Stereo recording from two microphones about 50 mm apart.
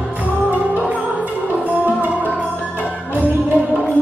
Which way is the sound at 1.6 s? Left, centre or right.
Right.